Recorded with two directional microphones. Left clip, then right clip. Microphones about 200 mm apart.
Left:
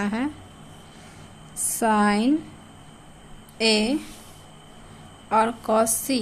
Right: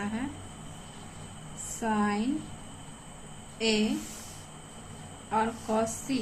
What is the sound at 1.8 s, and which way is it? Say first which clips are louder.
Speech: left 9 dB; 55° left (ahead or behind).